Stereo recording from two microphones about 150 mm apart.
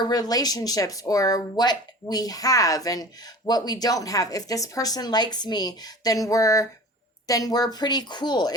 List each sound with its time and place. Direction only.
0.0 s speech: 25° left (ahead or behind)